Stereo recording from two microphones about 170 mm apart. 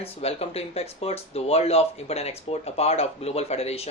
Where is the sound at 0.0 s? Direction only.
35° left (ahead or behind).